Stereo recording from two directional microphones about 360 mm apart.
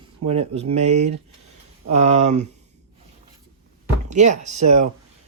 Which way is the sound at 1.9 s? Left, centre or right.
Centre.